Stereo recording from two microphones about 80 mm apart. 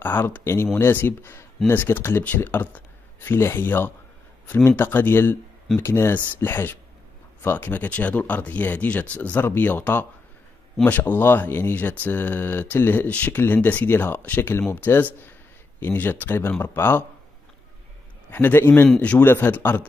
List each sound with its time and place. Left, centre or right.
0.0 s speech: left
18.3 s speech: left